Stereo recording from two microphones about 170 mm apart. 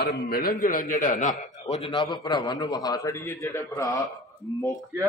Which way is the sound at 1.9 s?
25° left (ahead or behind).